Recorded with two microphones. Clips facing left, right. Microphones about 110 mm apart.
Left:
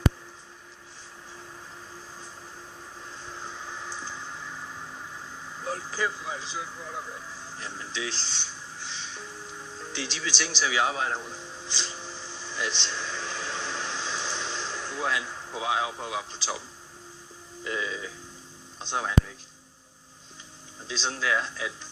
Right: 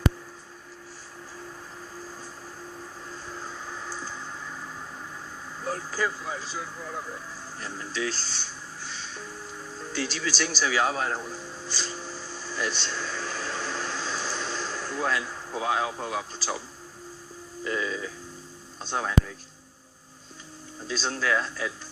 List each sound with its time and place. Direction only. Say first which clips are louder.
3.3 s a sound: even; 45° right (ahead or behind)
5.6 s vehicle: right 1 dB; 45° right (ahead or behind)
7.6 s speech: right 4 dB; 45° right (ahead or behind)
11.4 s music: right 2 dB; 45° right (ahead or behind)
12.0 s a sound: right 3 dB; 45° right (ahead or behind)
17.6 s speech: right 3 dB; 40° right (ahead or behind)
21.0 s speech: right 1 dB; 45° right (ahead or behind)